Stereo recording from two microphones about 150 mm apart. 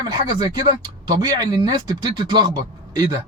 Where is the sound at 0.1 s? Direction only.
25° right (ahead or behind).